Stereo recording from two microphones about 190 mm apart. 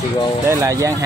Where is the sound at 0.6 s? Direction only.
15° right (ahead or behind).